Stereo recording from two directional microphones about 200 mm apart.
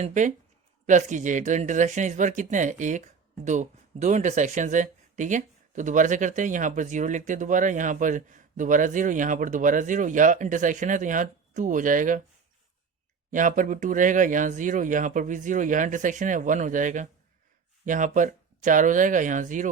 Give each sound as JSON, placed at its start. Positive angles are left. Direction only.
{"t": 0.0, "sound": "speech", "side_deg": -40}
{"t": 13.3, "sound": "speech", "side_deg": -40}